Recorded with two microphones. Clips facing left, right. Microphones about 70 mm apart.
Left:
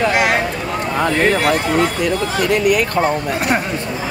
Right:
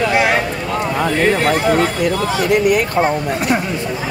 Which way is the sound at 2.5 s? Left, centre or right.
Right.